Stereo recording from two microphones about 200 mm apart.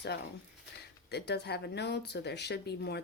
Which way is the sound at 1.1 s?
55° left (ahead or behind).